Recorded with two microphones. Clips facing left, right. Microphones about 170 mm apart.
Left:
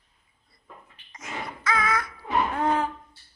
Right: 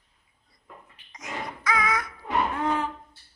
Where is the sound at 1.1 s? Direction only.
15° right (ahead or behind).